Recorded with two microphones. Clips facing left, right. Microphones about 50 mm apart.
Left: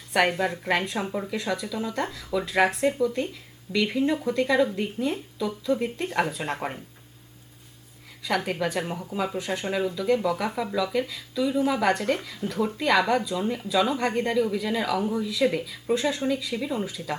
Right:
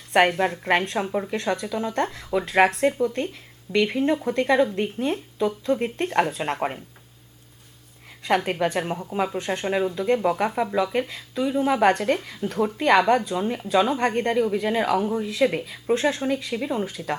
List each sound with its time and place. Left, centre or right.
0.1 s a woman's voice: right
1.3 s speech: right
6.6 s speech: right
8.4 s speech: right